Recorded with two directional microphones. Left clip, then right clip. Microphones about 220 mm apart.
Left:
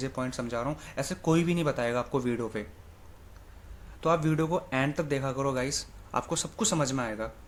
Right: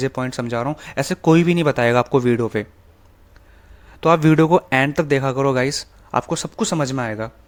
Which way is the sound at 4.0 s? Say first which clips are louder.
Right 12 dB; 45° right (ahead or behind).